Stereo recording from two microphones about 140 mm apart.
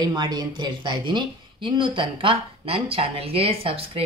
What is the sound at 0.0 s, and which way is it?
A woman's voice, 30° right (ahead or behind).